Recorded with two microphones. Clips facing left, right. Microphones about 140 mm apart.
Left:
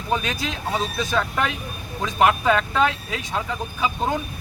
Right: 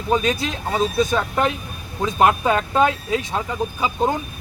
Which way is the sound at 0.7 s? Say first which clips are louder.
Right 5 dB; 20° right (ahead or behind).